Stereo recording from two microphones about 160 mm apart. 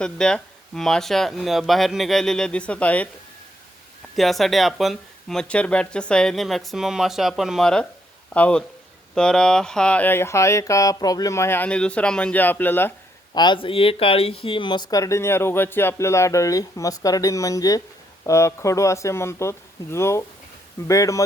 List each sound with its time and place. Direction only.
0.0 s speech: 5° left (ahead or behind)
4.1 s speech: centre (ahead or behind)
13.3 s speech: 30° left (ahead or behind)